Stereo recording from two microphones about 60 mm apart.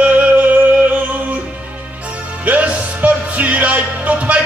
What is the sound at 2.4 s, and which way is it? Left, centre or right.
Music, right.